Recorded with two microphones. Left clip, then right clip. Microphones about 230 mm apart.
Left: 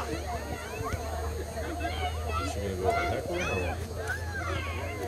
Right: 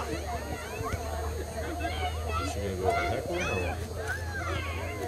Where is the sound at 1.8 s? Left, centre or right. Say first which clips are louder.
Even; right.